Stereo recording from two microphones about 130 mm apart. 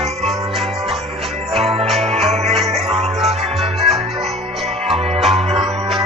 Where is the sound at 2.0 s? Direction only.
50° right (ahead or behind).